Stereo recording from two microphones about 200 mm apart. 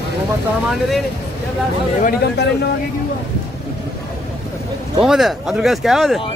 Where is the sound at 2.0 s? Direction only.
55° left (ahead or behind).